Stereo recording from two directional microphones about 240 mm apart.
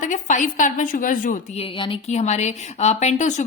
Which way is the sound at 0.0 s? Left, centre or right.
Left.